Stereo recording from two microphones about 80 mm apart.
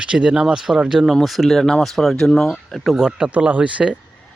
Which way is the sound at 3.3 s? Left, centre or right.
Centre.